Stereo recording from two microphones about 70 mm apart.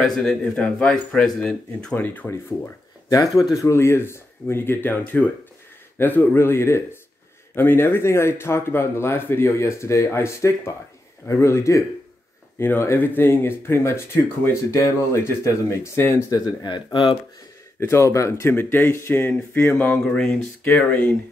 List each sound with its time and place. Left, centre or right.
0.0 s speech: centre
2.0 s speech: left
3.1 s speech: left
3.5 s speech: left
16.3 s speech: left
17.7 s speech: left
18.5 s speech: left
20.1 s speech: centre